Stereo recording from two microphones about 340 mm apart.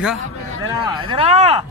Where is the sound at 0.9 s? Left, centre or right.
Centre.